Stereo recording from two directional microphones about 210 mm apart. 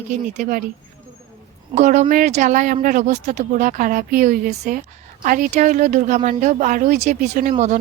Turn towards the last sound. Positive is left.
turn(degrees=-35)  # may be behind; listen again after turning